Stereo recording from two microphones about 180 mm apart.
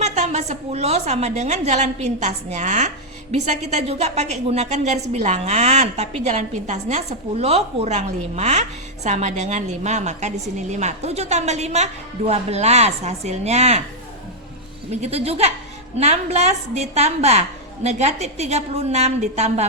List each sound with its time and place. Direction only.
0.0 s a woman's voice: 40° right (ahead or behind)
15.0 s a woman's voice: 35° right (ahead or behind)